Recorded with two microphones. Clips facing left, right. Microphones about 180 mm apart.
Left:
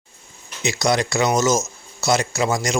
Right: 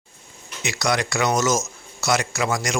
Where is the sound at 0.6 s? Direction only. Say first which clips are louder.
Left 3 dB; 25° left (ahead or behind).